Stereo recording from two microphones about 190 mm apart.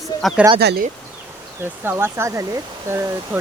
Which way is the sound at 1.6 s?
10° right (ahead or behind).